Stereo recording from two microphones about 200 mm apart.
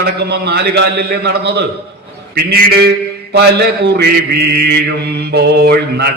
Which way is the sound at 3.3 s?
55° right (ahead or behind).